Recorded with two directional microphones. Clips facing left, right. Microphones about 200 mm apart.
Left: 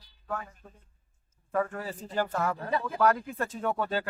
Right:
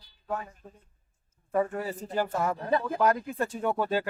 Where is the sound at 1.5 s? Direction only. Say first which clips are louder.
Right 3 dB; 20° right (ahead or behind).